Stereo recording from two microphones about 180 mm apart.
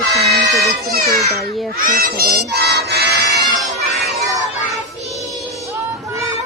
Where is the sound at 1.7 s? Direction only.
55° right (ahead or behind).